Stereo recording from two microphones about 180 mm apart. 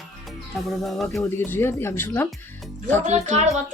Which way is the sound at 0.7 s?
Centre (ahead or behind).